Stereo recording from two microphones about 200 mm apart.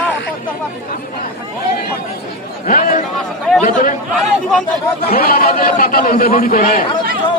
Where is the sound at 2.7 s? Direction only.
40° left (ahead or behind).